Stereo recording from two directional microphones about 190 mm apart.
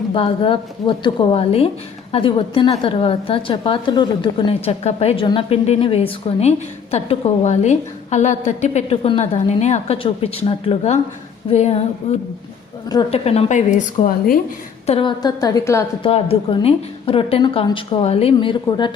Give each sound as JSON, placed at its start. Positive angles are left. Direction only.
{"t": 0.1, "sound": "a woman's voice", "side_deg": 25}
{"t": 14.8, "sound": "a woman's voice", "side_deg": 25}
{"t": 16.0, "sound": "a woman's voice", "side_deg": 30}